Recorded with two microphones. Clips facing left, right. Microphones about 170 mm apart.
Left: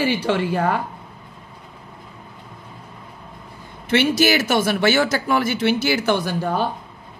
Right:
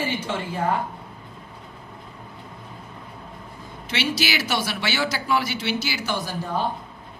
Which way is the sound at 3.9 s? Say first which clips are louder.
Left 9 dB; 50° left (ahead or behind).